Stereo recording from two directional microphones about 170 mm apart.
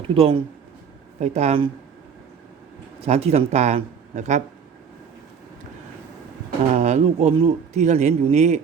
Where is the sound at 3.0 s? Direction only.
40° right (ahead or behind).